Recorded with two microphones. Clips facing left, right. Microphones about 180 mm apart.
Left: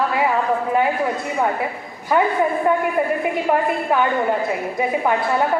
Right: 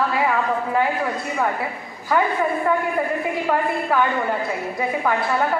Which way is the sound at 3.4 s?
20° left (ahead or behind).